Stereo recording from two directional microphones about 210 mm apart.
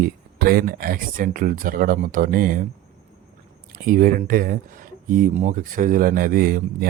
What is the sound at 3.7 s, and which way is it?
Speech, 40° right (ahead or behind).